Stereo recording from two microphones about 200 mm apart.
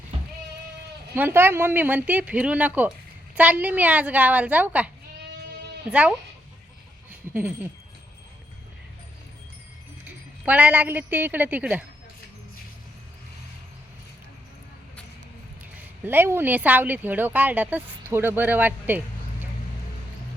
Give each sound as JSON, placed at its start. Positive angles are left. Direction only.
{"t": 0.1, "sound": "sheep", "side_deg": -30}
{"t": 1.1, "sound": "speech", "side_deg": -10}
{"t": 5.9, "sound": "speech", "side_deg": -5}
{"t": 7.1, "sound": "a sound", "side_deg": -10}
{"t": 10.0, "sound": "a woman's voice", "side_deg": -10}
{"t": 15.8, "sound": "speech", "side_deg": -10}